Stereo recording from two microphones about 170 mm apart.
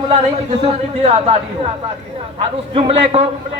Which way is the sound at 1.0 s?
40° right (ahead or behind).